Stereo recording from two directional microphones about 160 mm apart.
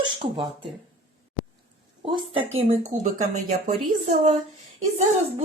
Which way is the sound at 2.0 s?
35° right (ahead or behind).